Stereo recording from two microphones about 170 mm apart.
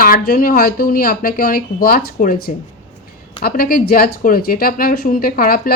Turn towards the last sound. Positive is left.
turn(degrees=60)  # may be behind; listen again after turning